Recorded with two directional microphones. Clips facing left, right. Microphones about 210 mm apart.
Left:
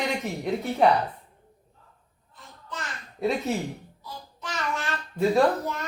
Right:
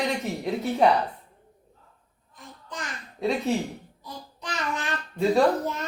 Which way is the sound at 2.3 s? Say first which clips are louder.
Even; 15° right (ahead or behind).